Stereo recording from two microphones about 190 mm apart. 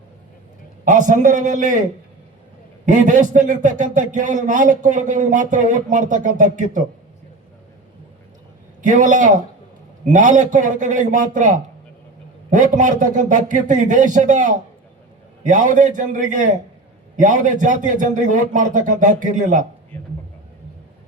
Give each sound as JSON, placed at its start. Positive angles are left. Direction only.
{"t": 0.9, "sound": "a man's voice", "side_deg": -40}
{"t": 2.8, "sound": "a man's voice", "side_deg": -40}
{"t": 8.8, "sound": "a man's voice", "side_deg": -40}